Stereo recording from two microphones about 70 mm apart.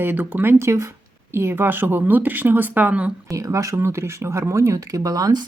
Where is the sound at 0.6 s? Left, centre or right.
Right.